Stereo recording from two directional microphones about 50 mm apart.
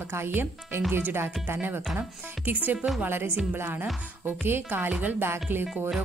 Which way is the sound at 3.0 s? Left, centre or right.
Right.